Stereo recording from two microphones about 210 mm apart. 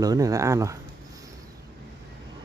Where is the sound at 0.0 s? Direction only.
15° right (ahead or behind).